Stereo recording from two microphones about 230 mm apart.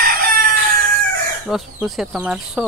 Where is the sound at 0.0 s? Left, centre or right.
Right.